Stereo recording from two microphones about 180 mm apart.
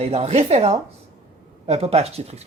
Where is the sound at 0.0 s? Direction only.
35° right (ahead or behind).